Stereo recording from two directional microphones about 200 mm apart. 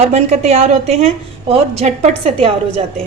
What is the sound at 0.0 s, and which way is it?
A woman's voice, 30° right (ahead or behind).